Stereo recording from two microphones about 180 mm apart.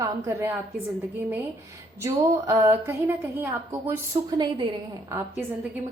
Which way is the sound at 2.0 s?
15° right (ahead or behind).